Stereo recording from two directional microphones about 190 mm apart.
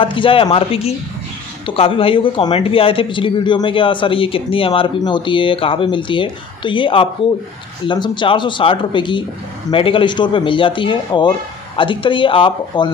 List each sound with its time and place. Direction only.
0.0 s a man's voice: 25° left (ahead or behind)